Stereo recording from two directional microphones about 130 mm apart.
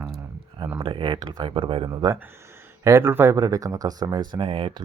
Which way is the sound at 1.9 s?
25° right (ahead or behind).